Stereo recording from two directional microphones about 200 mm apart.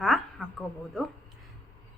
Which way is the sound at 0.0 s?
Centre (ahead or behind).